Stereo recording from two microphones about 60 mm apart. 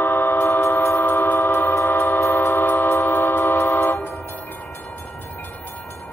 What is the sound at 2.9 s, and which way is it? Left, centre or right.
Music, left.